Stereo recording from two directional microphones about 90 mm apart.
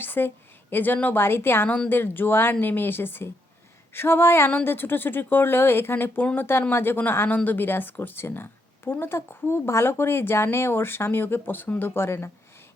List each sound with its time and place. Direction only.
0.0 s a woman's voice: 25° left (ahead or behind)